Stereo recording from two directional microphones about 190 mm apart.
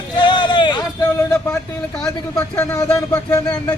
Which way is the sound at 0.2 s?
25° left (ahead or behind).